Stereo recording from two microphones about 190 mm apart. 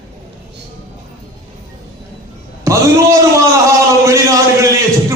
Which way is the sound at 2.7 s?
15° right (ahead or behind).